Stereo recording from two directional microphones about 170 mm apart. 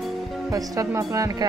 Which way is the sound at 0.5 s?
20° right (ahead or behind).